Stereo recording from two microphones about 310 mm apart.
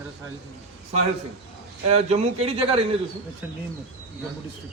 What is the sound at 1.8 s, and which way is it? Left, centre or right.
Speech, centre.